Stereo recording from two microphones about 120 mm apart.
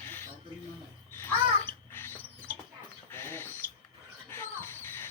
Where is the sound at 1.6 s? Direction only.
20° left (ahead or behind).